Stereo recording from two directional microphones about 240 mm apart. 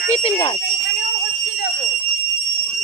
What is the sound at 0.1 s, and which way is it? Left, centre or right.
Speech, left.